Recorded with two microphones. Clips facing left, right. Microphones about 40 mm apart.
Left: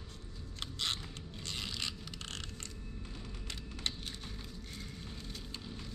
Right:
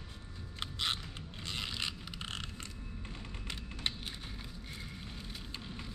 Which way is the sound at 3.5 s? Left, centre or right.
Centre.